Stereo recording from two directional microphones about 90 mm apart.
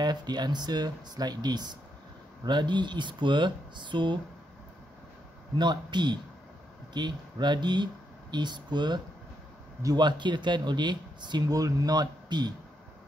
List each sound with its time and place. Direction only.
0.0 s speech: 50° right (ahead or behind)
5.6 s speech: 55° right (ahead or behind)